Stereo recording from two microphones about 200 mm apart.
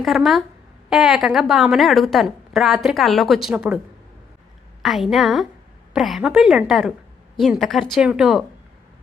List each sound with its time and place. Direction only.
0.0 s a woman's voice: centre (ahead or behind)
4.8 s a woman's voice: centre (ahead or behind)